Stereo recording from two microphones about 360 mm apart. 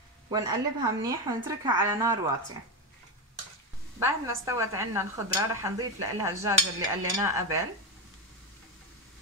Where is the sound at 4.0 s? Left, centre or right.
Centre.